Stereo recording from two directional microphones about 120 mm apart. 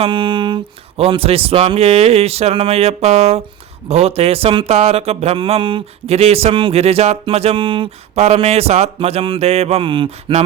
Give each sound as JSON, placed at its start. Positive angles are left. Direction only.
{"t": 0.0, "sound": "speech", "side_deg": -45}
{"t": 8.2, "sound": "speech", "side_deg": -60}